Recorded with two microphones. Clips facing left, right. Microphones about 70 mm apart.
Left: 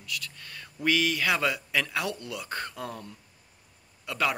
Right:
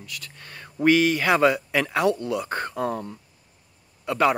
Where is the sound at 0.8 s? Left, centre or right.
Right.